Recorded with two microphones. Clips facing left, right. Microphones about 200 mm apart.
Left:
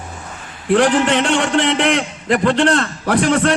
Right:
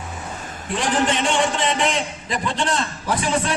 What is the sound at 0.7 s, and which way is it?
A man's voice, 65° left (ahead or behind).